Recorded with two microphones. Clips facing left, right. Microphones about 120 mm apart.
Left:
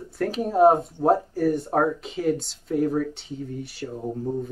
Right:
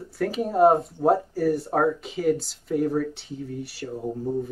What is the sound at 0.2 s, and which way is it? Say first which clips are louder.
Speech: left 1 dB; centre (ahead or behind).